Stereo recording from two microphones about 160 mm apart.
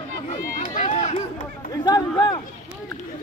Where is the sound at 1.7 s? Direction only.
25° left (ahead or behind).